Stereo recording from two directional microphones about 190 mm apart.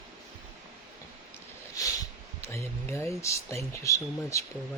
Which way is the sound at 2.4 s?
15° left (ahead or behind).